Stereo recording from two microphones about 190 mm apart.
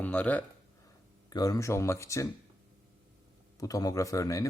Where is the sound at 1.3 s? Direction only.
20° left (ahead or behind).